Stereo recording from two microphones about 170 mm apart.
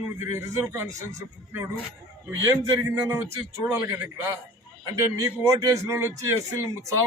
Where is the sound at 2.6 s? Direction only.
20° right (ahead or behind).